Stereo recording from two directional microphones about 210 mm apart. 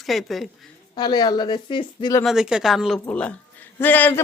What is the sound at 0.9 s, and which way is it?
Speech, 20° left (ahead or behind).